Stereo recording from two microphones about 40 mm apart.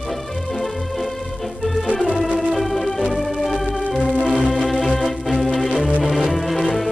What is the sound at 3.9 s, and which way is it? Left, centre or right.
Organ, left.